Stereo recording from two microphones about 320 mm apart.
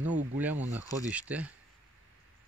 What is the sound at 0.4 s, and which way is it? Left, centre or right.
Speech, centre.